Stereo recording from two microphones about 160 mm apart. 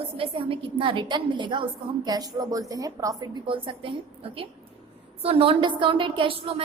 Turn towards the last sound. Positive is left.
turn(degrees=-35)  # may be behind; listen again after turning